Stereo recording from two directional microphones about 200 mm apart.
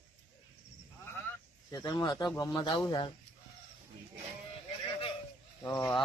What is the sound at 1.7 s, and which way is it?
Speech, 20° left (ahead or behind).